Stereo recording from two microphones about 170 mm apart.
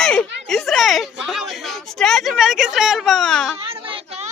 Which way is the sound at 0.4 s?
Centre (ahead or behind).